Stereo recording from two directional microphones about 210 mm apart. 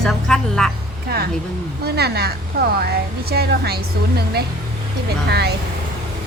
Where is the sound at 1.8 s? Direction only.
50° right (ahead or behind).